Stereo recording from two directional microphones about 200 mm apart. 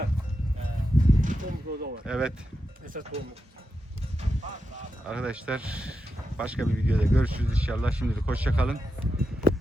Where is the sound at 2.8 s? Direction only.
40° right (ahead or behind).